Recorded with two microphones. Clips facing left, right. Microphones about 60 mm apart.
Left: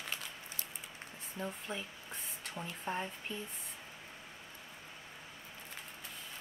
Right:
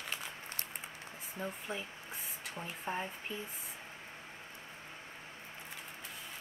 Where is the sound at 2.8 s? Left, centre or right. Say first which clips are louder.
Even; centre.